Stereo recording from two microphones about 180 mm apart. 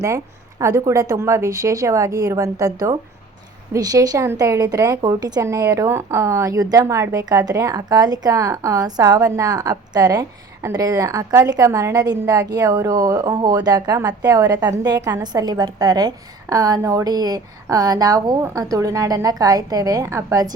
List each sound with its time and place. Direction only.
0.6 s a woman's voice: 15° right (ahead or behind)